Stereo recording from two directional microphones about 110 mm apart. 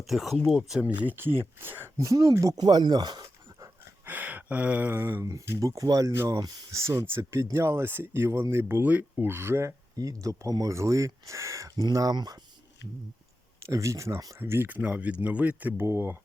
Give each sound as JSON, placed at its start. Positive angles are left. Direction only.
{"t": 0.1, "sound": "speech", "side_deg": 0}
{"t": 2.0, "sound": "speech", "side_deg": -35}
{"t": 4.0, "sound": "speech", "side_deg": -15}
{"t": 5.2, "sound": "speech", "side_deg": -30}
{"t": 13.6, "sound": "speech", "side_deg": -25}